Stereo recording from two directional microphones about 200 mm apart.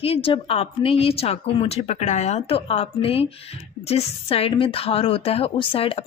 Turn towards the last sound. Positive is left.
turn(degrees=25)  # may be behind; listen again after turning